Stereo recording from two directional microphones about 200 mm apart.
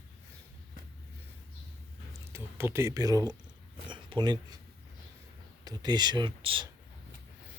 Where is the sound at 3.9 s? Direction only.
25° right (ahead or behind).